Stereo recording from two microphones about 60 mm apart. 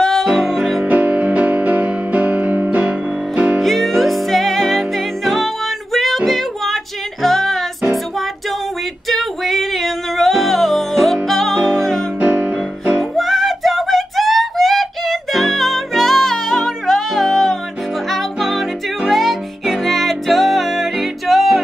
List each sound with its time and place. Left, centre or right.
0.0 s music: centre
0.8 s music: right
3.6 s music: centre
9.1 s music: centre
12.2 s music: right
13.1 s a sound: centre
18.1 s music: centre